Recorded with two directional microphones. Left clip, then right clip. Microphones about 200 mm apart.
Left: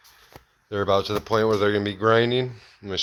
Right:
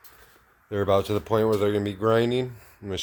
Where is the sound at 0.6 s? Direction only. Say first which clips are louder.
Left 1 dB; 15° right (ahead or behind).